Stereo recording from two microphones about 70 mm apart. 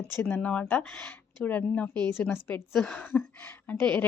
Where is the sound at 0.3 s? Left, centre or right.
Left.